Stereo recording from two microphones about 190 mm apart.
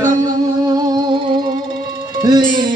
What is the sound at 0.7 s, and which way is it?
Music, 20° right (ahead or behind).